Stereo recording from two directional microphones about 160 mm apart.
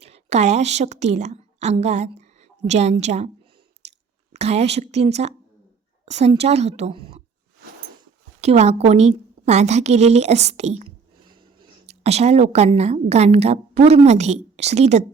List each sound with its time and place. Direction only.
0.0 s a woman's voice: 45° right (ahead or behind)
8.4 s a woman's voice: 40° right (ahead or behind)
11.9 s a woman's voice: 40° right (ahead or behind)